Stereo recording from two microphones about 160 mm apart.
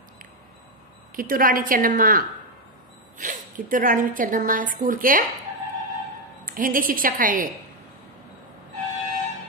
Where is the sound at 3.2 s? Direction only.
55° right (ahead or behind).